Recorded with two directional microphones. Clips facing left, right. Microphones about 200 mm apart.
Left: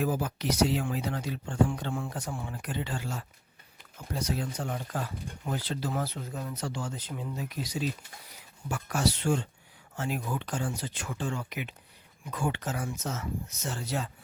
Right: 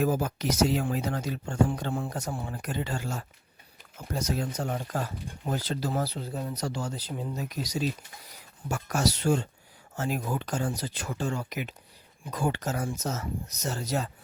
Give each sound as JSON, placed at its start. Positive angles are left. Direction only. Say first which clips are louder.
{"t": 0.0, "sound": "speech", "louder": "right 3 dB", "side_deg": -45}
{"t": 7.3, "sound": "speech", "louder": "right 2 dB", "side_deg": -40}